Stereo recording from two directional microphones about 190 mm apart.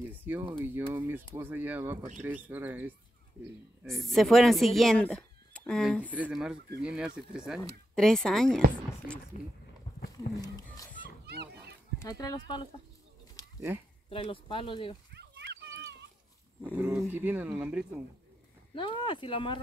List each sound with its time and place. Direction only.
0.1 s speech: 10° right (ahead or behind)
3.8 s speech: centre (ahead or behind)
6.0 s speech: 10° right (ahead or behind)
9.3 s speech: 40° left (ahead or behind)
10.1 s a sound: 20° left (ahead or behind)
11.2 s children playing: 60° right (ahead or behind)
12.0 s speech: 20° left (ahead or behind)
14.0 s speech: 30° left (ahead or behind)
15.1 s a sound: 65° right (ahead or behind)
16.7 s speech: 5° right (ahead or behind)
18.8 s speech: 25° left (ahead or behind)